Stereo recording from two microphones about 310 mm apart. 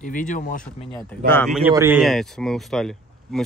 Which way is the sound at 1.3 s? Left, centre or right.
Centre.